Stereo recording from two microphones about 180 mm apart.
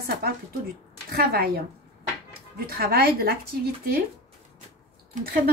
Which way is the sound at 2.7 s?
55° right (ahead or behind).